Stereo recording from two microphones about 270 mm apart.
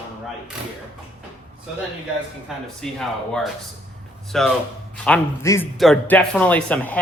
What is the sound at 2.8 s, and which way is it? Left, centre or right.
Speech, centre.